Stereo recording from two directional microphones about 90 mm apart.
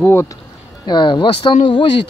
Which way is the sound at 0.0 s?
25° left (ahead or behind).